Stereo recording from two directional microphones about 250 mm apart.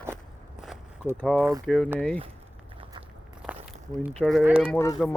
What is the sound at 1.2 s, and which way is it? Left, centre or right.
Speech, centre.